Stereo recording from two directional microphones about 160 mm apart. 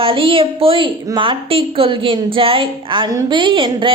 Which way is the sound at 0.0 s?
35° right (ahead or behind).